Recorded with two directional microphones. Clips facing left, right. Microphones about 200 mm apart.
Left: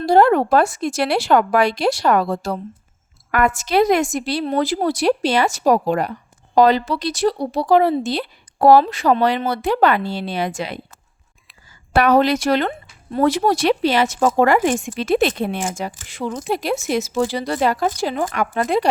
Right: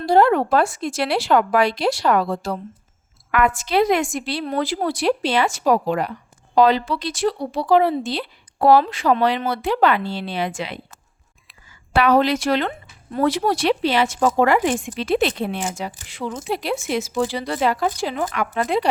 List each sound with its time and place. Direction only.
0.0 s a woman's voice: 45° left (ahead or behind)
11.9 s a woman's voice: 45° left (ahead or behind)